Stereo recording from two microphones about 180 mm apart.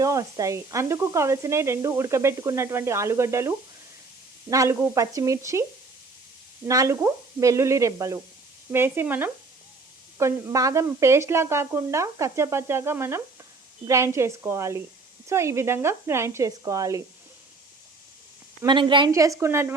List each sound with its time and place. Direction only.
0.0 s sizzle: 20° right (ahead or behind)
6.7 s sizzle: 15° right (ahead or behind)
18.6 s a woman's voice: 25° right (ahead or behind)